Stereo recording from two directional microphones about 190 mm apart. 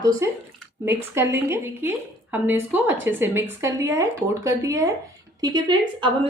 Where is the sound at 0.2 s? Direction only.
15° right (ahead or behind).